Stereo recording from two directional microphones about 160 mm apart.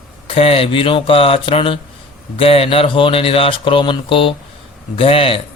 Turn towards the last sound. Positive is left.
turn(degrees=35)  # may be behind; listen again after turning